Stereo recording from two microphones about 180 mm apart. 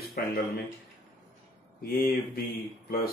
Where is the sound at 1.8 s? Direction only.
55° left (ahead or behind).